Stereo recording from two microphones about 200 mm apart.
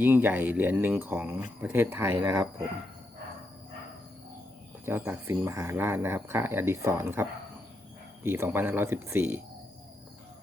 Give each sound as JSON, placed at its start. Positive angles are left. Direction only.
{"t": 0.0, "sound": "speech", "side_deg": -10}
{"t": 4.9, "sound": "speech", "side_deg": -10}